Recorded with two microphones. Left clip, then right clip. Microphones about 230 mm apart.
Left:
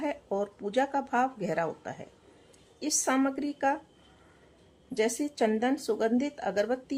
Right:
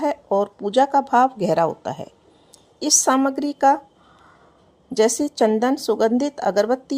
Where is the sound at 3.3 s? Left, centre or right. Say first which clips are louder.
Right 9 dB; right.